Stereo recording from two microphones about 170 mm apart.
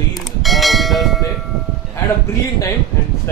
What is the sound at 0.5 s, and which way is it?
Bell, centre (ahead or behind).